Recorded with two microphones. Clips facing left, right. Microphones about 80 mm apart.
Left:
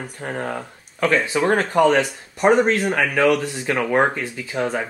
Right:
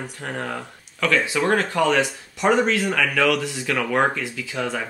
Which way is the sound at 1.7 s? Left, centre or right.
Left.